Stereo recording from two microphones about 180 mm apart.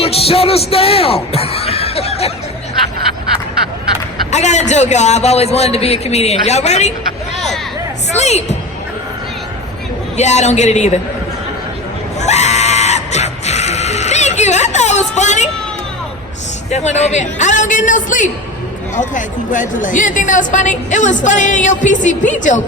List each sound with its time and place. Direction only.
0.0 s speech: 35° left (ahead or behind)
4.3 s a man's voice: 40° left (ahead or behind)
8.1 s speech: 40° left (ahead or behind)
10.2 s a man's voice: 40° left (ahead or behind)
12.2 s screaming: 40° left (ahead or behind)
16.6 s a woman's voice: 40° left (ahead or behind)